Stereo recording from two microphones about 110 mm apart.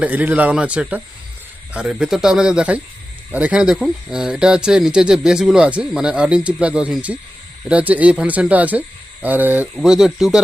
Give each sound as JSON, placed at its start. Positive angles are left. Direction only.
{"t": 0.0, "sound": "speech", "side_deg": -15}
{"t": 9.7, "sound": "speech", "side_deg": -5}